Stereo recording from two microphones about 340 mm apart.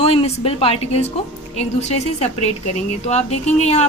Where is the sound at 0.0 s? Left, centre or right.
Centre.